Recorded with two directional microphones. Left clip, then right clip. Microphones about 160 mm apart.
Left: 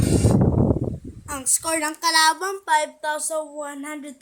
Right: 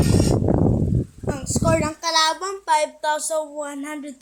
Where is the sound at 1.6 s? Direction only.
35° left (ahead or behind).